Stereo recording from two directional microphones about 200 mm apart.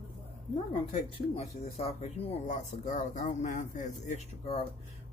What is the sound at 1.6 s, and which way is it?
Speech, 30° left (ahead or behind).